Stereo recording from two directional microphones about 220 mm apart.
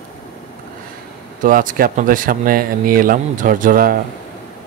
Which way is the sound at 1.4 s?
40° right (ahead or behind).